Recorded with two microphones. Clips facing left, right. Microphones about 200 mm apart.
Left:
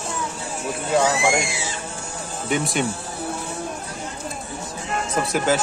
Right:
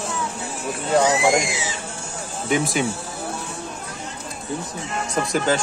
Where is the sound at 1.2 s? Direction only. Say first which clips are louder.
Right 2 dB; 20° right (ahead or behind).